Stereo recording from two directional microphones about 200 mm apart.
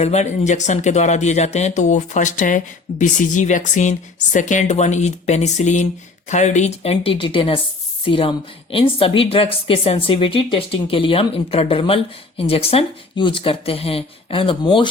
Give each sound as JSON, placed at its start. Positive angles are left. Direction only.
{"t": 0.0, "sound": "a woman's voice", "side_deg": 35}